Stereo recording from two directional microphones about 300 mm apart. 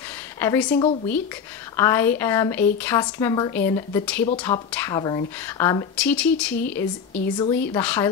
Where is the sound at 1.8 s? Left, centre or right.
Centre.